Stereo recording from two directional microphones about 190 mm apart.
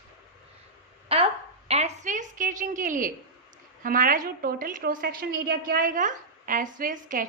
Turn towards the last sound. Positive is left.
turn(degrees=-45)  # may be behind; listen again after turning